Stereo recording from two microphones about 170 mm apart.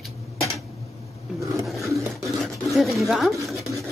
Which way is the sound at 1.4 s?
20° right (ahead or behind).